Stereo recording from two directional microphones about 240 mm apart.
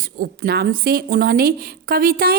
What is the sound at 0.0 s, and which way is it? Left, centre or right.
A woman's voice, right.